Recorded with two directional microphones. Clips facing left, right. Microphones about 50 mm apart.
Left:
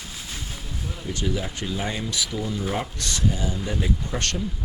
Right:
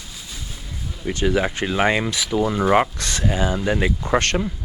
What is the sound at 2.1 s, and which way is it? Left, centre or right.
Speech, right.